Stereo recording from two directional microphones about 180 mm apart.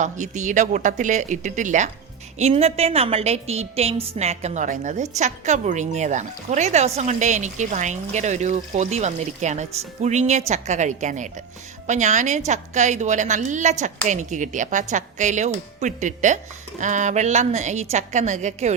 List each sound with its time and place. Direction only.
0.0 s speech: 40° right (ahead or behind)